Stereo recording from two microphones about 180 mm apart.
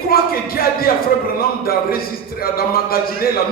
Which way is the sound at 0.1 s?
55° left (ahead or behind).